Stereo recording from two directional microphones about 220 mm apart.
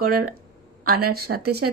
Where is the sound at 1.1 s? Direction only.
45° right (ahead or behind).